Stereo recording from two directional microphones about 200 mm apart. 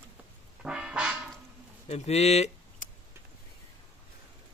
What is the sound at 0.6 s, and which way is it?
Music, 5° right (ahead or behind).